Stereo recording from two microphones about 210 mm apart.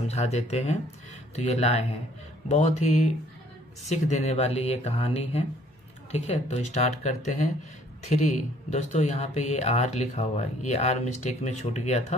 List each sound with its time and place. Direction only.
0.0 s speech: 30° left (ahead or behind)